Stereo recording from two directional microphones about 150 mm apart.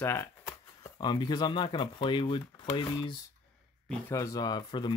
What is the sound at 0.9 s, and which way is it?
Speech, 30° left (ahead or behind).